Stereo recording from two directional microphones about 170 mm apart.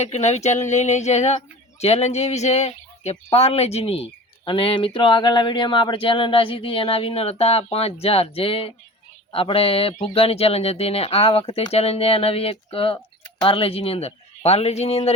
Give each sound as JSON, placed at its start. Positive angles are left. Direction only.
{"t": 0.0, "sound": "speech", "side_deg": 40}